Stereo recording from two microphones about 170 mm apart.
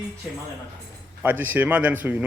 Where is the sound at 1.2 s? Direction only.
10° right (ahead or behind).